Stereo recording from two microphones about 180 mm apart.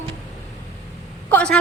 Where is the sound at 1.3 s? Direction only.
5° left (ahead or behind).